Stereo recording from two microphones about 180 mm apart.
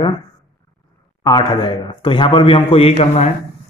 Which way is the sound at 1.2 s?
25° left (ahead or behind).